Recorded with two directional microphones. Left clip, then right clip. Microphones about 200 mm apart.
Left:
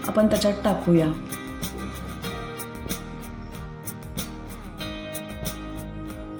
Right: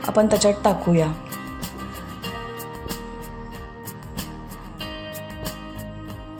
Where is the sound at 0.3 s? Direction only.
35° right (ahead or behind).